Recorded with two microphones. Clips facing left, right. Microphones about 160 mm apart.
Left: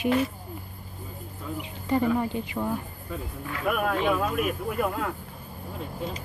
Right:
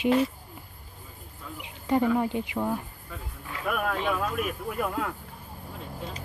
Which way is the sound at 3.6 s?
10° left (ahead or behind).